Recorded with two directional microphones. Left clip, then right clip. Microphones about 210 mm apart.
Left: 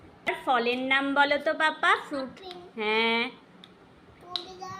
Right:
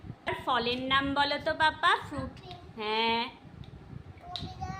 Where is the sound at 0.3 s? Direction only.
5° left (ahead or behind).